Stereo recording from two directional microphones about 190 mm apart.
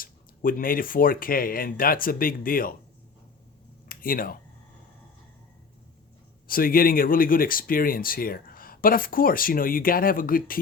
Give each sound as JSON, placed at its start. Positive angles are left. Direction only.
{"t": 0.0, "sound": "speech", "side_deg": 45}
{"t": 3.8, "sound": "speech", "side_deg": 50}
{"t": 6.5, "sound": "speech", "side_deg": 50}